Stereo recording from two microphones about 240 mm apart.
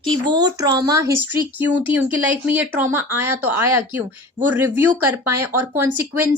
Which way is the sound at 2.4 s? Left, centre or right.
Centre.